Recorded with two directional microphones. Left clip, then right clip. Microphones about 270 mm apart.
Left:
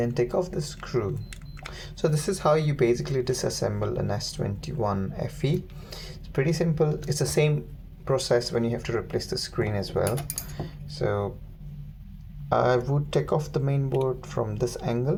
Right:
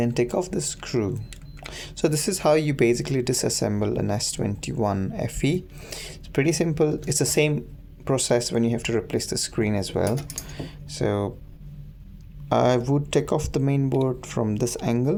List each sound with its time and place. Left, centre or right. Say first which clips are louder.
0.0 s speech: right 1 dB; right
12.5 s speech: right 2 dB; right